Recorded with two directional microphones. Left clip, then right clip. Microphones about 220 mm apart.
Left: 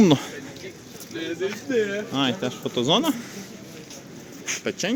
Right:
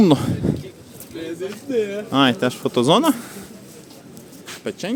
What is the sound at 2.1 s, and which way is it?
Speech, 40° right (ahead or behind).